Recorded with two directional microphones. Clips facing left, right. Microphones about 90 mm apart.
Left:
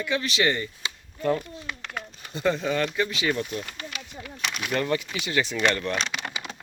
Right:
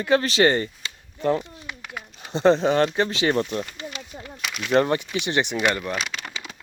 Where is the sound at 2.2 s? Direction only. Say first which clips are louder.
Right 8 dB; 30° right (ahead or behind).